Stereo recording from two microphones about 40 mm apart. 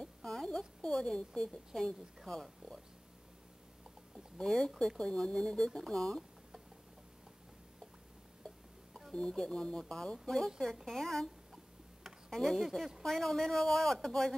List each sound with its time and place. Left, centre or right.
0.2 s a sound: centre
0.5 s speech: centre
1.0 s speech: centre
4.4 s speech: centre
9.5 s speech: centre
10.4 s speech: centre
11.5 s tick-tock: centre
12.4 s speech: centre
12.6 s speech: centre
13.0 s speech: centre